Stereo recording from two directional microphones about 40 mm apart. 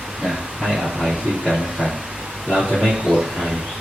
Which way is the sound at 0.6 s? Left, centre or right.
Centre.